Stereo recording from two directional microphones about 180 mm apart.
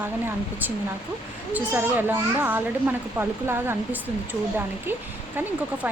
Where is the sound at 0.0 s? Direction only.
10° right (ahead or behind).